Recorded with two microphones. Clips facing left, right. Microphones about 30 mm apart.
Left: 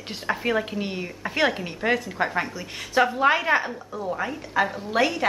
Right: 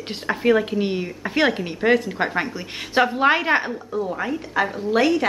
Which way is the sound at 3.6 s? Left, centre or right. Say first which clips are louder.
Right 4 dB; centre.